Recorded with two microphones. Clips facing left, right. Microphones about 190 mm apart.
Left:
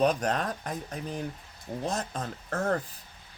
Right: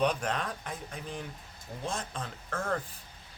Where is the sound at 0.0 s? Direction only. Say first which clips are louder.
Left 4 dB; 40° left (ahead or behind).